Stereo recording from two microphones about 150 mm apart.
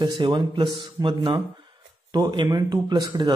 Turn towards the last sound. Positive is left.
turn(degrees=-30)  # may be behind; listen again after turning